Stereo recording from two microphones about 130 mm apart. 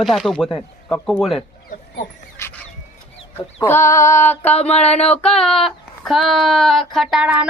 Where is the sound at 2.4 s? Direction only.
20° left (ahead or behind).